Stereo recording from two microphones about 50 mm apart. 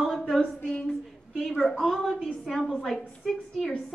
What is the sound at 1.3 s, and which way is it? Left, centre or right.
A woman's voice, centre.